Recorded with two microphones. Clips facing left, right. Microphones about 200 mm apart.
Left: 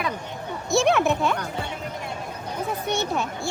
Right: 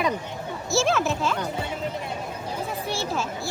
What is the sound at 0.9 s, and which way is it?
Speech, 60° left (ahead or behind).